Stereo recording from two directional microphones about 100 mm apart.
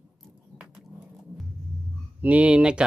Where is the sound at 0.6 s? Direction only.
5° right (ahead or behind).